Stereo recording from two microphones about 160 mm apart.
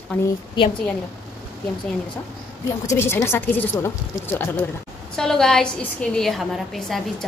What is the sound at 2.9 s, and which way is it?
A woman's voice, 15° left (ahead or behind).